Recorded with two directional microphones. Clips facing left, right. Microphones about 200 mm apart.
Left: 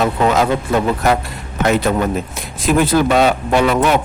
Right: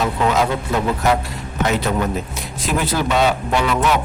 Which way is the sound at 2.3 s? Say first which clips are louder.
Left 6 dB; 50° left (ahead or behind).